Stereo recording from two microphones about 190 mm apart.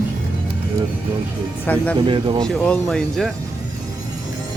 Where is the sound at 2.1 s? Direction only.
25° right (ahead or behind).